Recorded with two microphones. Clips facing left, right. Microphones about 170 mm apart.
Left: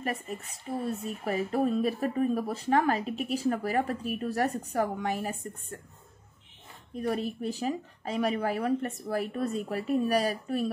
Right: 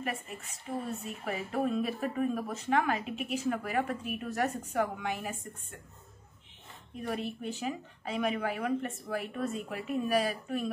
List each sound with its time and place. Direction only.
0.0 s speech: 35° left (ahead or behind)
7.0 s speech: 40° left (ahead or behind)